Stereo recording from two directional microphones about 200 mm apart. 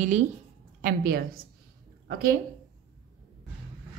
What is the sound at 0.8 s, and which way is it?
A woman's voice, 50° right (ahead or behind).